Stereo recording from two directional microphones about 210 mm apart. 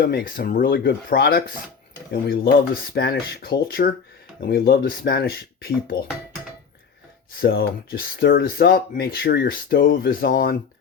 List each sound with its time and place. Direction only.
0.0 s speech: 45° left (ahead or behind)
7.3 s speech: 45° left (ahead or behind)